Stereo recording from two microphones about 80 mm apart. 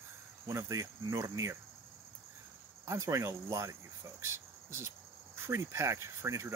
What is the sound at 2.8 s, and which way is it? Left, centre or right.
Speech, right.